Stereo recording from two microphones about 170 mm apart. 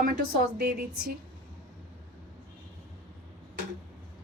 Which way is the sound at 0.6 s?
70° right (ahead or behind).